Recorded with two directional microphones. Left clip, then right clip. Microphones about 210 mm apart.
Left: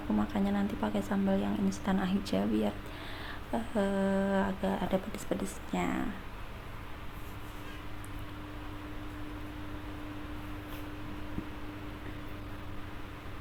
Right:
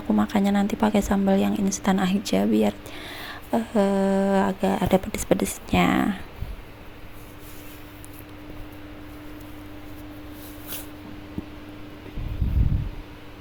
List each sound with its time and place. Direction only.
0.2 s a woman's voice: 35° right (ahead or behind)